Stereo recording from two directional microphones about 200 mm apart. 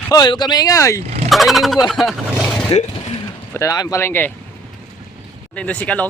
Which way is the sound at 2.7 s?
30° left (ahead or behind).